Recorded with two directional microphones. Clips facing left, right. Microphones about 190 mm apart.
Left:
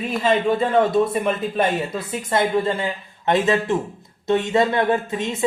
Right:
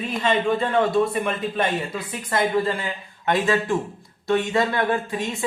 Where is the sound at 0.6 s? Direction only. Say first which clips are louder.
Left 2 dB; 25° left (ahead or behind).